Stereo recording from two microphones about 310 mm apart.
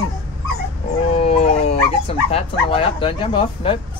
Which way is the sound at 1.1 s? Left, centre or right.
Centre.